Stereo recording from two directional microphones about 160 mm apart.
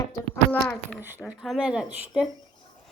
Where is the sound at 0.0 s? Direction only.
15° left (ahead or behind).